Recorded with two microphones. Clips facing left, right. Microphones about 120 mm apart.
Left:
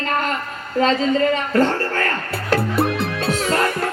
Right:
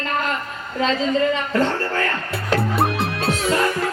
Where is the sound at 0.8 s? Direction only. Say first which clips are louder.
Left 3 dB; 45° left (ahead or behind).